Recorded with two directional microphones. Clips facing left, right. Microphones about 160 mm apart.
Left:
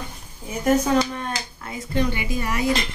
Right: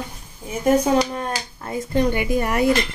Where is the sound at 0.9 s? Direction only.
35° right (ahead or behind).